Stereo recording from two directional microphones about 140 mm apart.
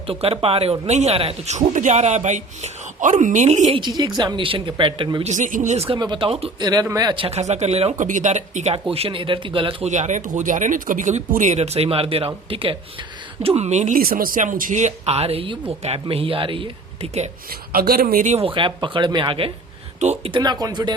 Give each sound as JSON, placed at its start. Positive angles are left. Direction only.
{"t": 0.1, "sound": "speech", "side_deg": -45}
{"t": 3.8, "sound": "speech", "side_deg": -30}
{"t": 5.2, "sound": "speech", "side_deg": -65}
{"t": 6.0, "sound": "speech", "side_deg": -35}
{"t": 6.6, "sound": "speech", "side_deg": -30}
{"t": 7.3, "sound": "speech", "side_deg": -50}
{"t": 8.0, "sound": "speech", "side_deg": -65}
{"t": 9.9, "sound": "speech", "side_deg": -60}
{"t": 17.7, "sound": "speech", "side_deg": -90}
{"t": 18.3, "sound": "speech", "side_deg": -40}
{"t": 20.0, "sound": "speech", "side_deg": -55}
{"t": 20.3, "sound": "speech", "side_deg": -30}